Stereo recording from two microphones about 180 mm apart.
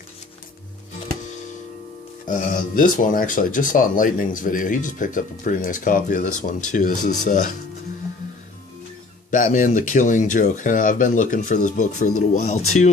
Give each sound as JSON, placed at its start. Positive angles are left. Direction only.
{"t": 2.2, "sound": "speech", "side_deg": 50}
{"t": 9.3, "sound": "speech", "side_deg": 45}